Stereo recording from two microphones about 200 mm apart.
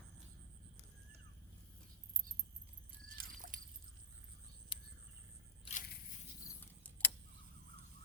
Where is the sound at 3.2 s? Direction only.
40° right (ahead or behind).